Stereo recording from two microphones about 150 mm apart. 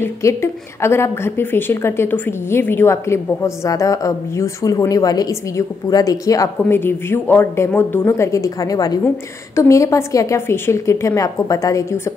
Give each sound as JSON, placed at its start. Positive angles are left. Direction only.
{"t": 0.0, "sound": "a woman's voice", "side_deg": 20}